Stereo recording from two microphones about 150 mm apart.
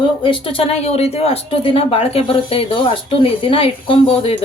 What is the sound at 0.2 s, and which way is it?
Speech, 35° left (ahead or behind).